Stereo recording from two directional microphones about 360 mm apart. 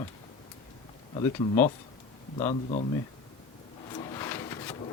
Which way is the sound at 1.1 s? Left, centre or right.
Centre.